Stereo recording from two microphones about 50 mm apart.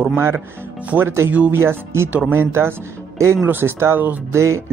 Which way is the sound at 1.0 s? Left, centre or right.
Right.